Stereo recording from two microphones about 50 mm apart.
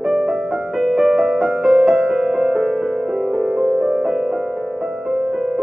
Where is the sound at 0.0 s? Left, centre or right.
Centre.